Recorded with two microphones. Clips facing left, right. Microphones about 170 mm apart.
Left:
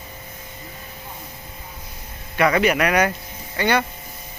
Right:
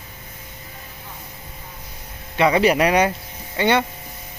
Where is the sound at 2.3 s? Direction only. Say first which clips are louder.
Right 2 dB; 25° right (ahead or behind).